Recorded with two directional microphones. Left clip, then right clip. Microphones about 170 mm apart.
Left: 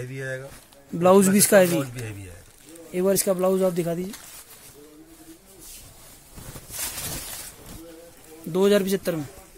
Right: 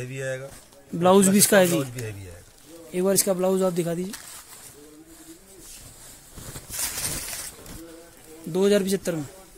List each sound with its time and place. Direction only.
0.0 s speech: 30° right (ahead or behind)
0.9 s speech: 5° left (ahead or behind)
8.5 s a man's voice: 10° left (ahead or behind)